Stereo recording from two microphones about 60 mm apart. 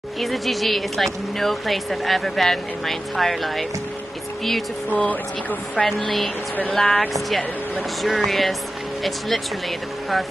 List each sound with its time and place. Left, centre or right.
0.2 s speech: centre
4.9 s speech: left
5.8 s speech: centre